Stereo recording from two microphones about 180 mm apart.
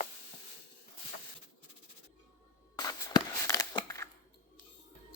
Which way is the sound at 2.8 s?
20° left (ahead or behind).